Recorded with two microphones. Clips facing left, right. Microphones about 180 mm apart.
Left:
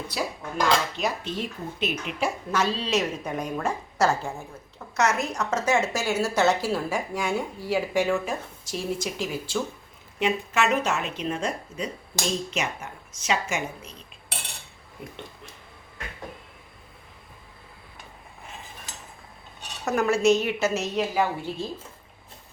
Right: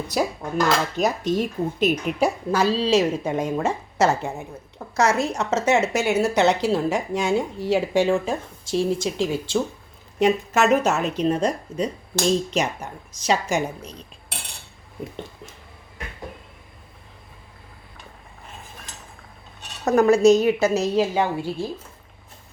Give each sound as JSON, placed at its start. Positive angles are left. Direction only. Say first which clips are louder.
{"t": 0.1, "sound": "speech", "louder": "right 9 dB", "side_deg": -45}
{"t": 10.2, "sound": "speech", "louder": "right 6 dB", "side_deg": -40}
{"t": 19.8, "sound": "speech", "louder": "right 7 dB", "side_deg": -35}
{"t": 21.3, "sound": "speech", "louder": "right 5 dB", "side_deg": -10}